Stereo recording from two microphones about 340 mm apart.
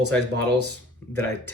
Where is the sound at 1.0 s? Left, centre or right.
Centre.